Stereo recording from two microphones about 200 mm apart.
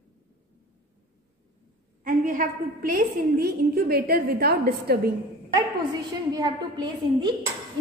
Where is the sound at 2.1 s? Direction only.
45° right (ahead or behind).